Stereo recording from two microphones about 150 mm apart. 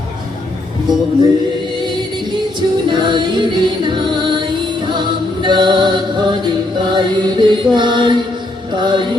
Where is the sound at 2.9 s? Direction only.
30° right (ahead or behind).